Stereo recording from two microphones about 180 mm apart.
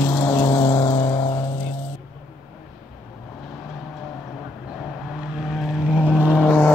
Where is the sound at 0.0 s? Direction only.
15° left (ahead or behind).